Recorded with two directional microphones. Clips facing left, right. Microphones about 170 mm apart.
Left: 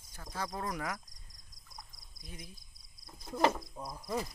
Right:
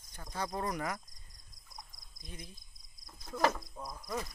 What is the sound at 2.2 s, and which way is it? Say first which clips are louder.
Speech: right 1 dB; 10° left (ahead or behind).